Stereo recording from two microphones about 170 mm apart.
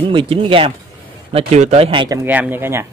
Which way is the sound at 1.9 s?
30° right (ahead or behind).